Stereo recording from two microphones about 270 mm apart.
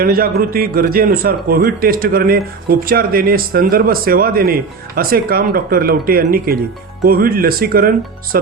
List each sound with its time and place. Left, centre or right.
0.0 s a man's voice: right